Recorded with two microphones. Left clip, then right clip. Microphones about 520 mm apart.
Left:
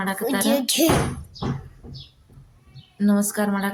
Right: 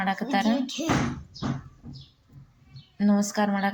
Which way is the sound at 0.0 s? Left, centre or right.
Left.